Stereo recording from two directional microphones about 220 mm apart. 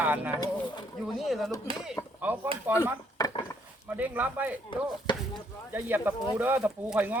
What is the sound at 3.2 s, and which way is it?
Wood, 15° left (ahead or behind).